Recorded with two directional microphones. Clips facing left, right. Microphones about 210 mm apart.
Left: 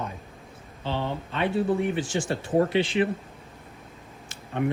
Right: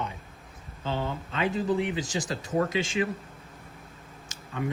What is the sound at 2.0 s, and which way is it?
Speech, 40° right (ahead or behind).